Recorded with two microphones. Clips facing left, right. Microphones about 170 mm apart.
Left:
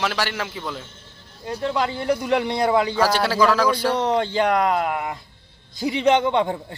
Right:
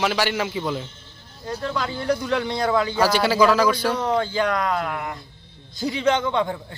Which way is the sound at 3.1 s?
Centre (ahead or behind).